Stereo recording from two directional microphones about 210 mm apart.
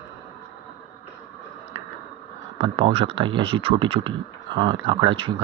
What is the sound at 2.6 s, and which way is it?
Speech, 25° right (ahead or behind).